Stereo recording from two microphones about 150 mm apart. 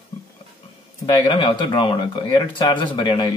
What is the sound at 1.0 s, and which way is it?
Speech, 30° left (ahead or behind).